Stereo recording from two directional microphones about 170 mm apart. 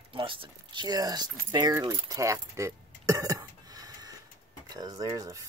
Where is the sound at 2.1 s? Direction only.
20° right (ahead or behind).